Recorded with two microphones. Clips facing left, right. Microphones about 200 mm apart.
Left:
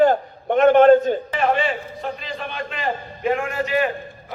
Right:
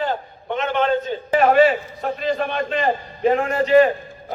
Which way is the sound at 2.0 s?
40° right (ahead or behind).